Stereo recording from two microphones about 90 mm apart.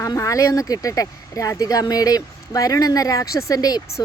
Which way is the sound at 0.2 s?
35° left (ahead or behind).